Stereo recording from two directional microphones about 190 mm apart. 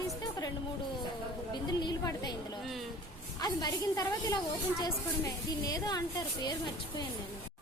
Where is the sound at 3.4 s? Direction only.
20° left (ahead or behind).